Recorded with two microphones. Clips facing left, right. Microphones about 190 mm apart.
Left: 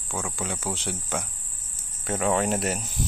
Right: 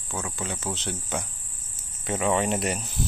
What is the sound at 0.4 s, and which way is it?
Cricket, 10° left (ahead or behind).